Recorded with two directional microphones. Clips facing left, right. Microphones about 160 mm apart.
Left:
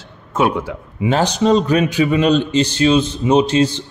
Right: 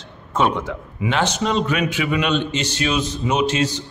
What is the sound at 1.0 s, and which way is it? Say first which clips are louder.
A man's voice: left 6 dB; 35° left (ahead or behind).